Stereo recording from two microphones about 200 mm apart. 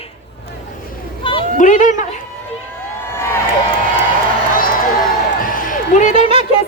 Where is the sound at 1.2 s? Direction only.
25° left (ahead or behind).